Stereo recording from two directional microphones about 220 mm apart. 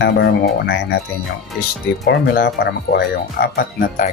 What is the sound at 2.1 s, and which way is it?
Speech, 50° left (ahead or behind).